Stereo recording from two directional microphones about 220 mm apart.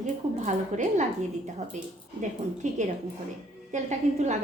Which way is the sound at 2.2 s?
35° right (ahead or behind).